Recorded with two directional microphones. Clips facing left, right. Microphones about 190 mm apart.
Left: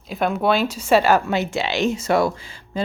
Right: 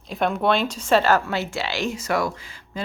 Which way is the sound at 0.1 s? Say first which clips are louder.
Left 1 dB; centre (ahead or behind).